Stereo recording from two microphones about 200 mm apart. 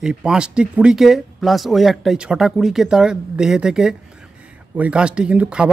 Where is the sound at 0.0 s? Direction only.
5° right (ahead or behind).